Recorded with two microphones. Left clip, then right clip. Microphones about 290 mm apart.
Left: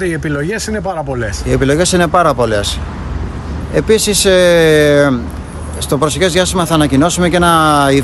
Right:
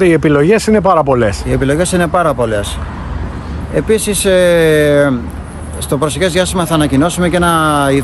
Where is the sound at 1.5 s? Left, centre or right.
Centre.